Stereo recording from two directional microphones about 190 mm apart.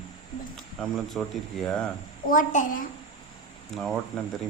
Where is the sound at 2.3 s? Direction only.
45° left (ahead or behind).